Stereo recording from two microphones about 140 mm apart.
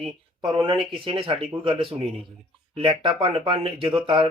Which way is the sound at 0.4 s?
35° right (ahead or behind).